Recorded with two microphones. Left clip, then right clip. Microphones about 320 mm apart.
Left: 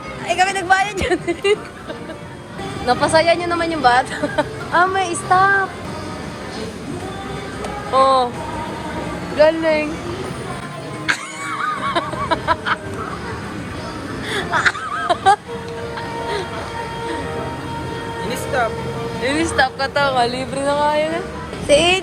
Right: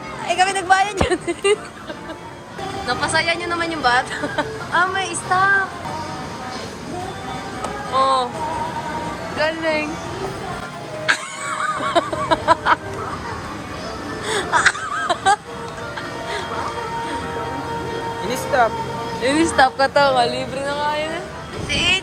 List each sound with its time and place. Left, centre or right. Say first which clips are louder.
0.3 s speech: left 1 dB; centre
2.8 s speech: left 5 dB; centre
7.9 s speech: left 4 dB; centre
9.4 s speech: left 6 dB; centre
11.1 s music: right 1 dB; centre
11.8 s a sound: right 1 dB; centre
14.3 s a sound: right 1 dB; centre
18.3 s music: right 3 dB; right
19.2 s speech: right 2 dB; centre